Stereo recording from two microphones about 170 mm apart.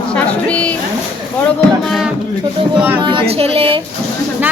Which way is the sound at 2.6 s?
30° right (ahead or behind).